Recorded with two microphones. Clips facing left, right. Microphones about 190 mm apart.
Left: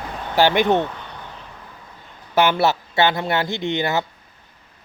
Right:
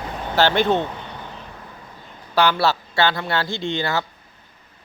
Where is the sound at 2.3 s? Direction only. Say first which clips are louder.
Left 1 dB; 20° left (ahead or behind).